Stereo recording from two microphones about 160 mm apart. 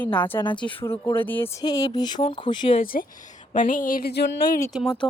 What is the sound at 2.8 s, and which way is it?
Speech, 65° left (ahead or behind).